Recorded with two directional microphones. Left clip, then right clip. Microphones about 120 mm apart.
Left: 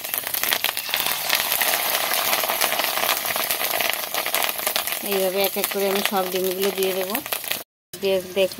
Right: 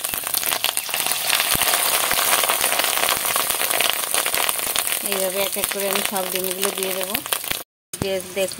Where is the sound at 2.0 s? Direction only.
25° right (ahead or behind).